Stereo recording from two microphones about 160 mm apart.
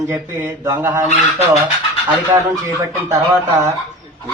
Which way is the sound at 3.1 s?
15° right (ahead or behind).